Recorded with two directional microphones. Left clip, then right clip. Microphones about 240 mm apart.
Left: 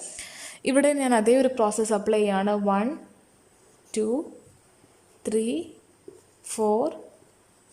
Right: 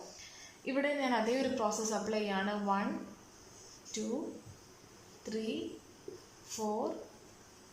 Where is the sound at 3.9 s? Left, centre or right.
Left.